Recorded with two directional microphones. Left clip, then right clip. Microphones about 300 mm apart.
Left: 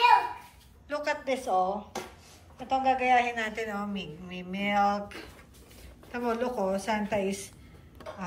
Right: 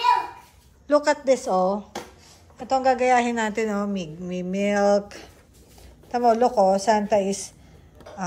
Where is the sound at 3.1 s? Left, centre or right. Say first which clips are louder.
Right 5 dB; centre.